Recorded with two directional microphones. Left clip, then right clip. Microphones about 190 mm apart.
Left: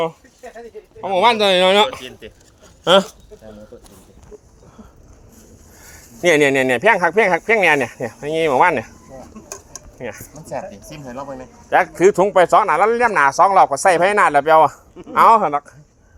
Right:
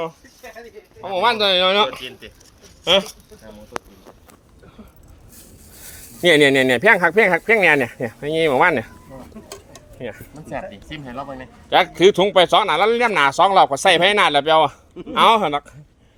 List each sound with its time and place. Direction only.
1.0 s speech: 50° left (ahead or behind)
2.0 s speech: 25° left (ahead or behind)
6.2 s speech: 25° right (ahead or behind)
10.0 s speech: 5° right (ahead or behind)
10.4 s a woman's voice: 5° left (ahead or behind)
11.2 s speech: 10° right (ahead or behind)
11.7 s speech: 25° right (ahead or behind)
13.1 s speech: 40° right (ahead or behind)
13.8 s speech: 25° right (ahead or behind)